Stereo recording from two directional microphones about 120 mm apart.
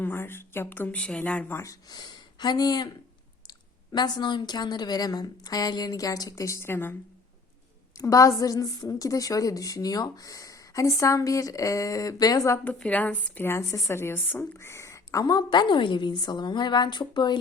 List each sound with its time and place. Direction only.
0.0 s speech: 20° left (ahead or behind)
1.6 s a woman's voice: 30° left (ahead or behind)
3.9 s a woman's voice: 35° left (ahead or behind); by 6.9 s 20° left (ahead or behind)
7.9 s a woman's voice: 25° left (ahead or behind)
12.6 s a woman's voice: 10° left (ahead or behind); by 17.3 s 40° left (ahead or behind)